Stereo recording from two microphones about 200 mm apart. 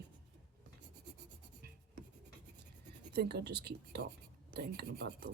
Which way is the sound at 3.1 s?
55° right (ahead or behind).